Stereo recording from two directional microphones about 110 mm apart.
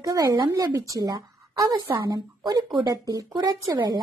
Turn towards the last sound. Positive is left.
turn(degrees=-40)  # may be behind; listen again after turning